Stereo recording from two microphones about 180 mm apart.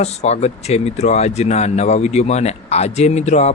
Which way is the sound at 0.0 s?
35° left (ahead or behind).